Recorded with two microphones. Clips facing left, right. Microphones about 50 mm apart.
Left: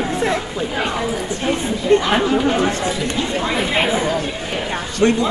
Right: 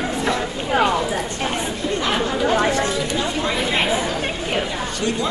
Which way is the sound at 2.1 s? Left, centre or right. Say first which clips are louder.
Left 3 dB; centre.